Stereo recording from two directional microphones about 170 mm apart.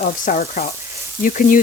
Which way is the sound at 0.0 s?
50° left (ahead or behind).